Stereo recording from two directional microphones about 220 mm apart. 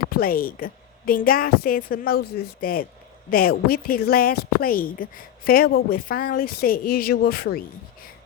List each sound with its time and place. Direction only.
0.1 s a woman's voice: 40° left (ahead or behind)